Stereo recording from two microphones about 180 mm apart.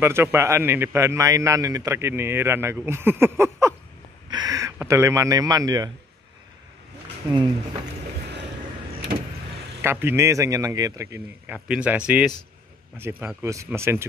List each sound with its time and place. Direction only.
0.0 s a man's voice: 15° right (ahead or behind)
9.8 s a man's voice: 15° right (ahead or behind)